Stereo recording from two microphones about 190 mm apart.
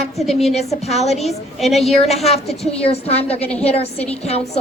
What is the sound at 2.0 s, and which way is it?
A woman's voice, 35° left (ahead or behind).